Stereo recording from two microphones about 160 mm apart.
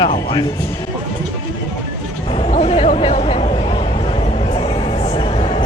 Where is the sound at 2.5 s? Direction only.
40° left (ahead or behind).